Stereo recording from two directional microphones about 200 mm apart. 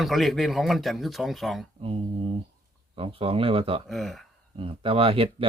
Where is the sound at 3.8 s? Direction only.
Centre (ahead or behind).